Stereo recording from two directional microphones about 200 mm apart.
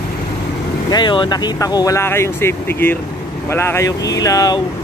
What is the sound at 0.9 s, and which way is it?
Speech, 20° left (ahead or behind).